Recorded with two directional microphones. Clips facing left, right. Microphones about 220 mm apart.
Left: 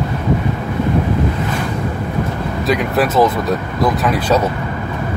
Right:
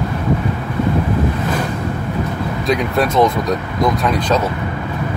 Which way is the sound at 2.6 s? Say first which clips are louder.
Left 1 dB; 5° left (ahead or behind).